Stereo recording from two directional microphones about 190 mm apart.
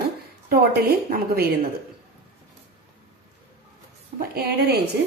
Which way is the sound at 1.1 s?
55° right (ahead or behind).